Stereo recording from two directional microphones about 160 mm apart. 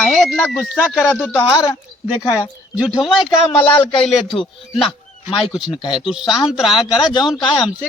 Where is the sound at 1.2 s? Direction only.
10° left (ahead or behind).